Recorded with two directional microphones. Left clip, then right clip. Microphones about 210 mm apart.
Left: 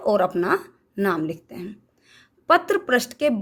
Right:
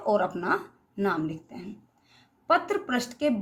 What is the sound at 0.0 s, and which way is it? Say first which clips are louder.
A woman's voice: left 5 dB; 50° left (ahead or behind).